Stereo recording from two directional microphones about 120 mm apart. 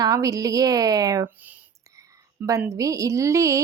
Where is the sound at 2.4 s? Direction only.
15° right (ahead or behind).